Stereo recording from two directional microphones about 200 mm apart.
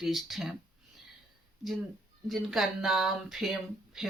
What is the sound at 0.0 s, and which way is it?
Speech, centre (ahead or behind).